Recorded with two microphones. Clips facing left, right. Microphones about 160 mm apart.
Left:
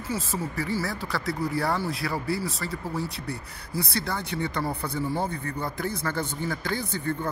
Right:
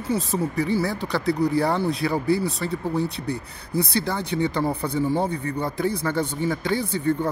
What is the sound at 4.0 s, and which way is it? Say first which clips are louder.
Speech: right 6 dB; 20° right (ahead or behind).